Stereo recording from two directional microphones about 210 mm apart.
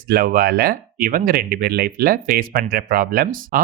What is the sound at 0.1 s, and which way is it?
Speech, 45° right (ahead or behind).